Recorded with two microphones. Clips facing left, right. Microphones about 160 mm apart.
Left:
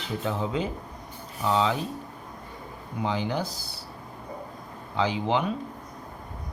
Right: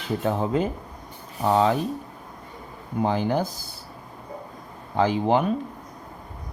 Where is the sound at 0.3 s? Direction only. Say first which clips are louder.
Right 5 dB; 50° right (ahead or behind).